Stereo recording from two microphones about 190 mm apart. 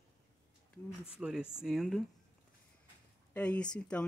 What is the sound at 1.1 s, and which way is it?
Speech, 5° right (ahead or behind).